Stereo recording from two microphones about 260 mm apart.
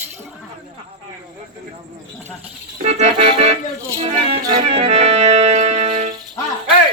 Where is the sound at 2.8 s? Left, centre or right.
Right.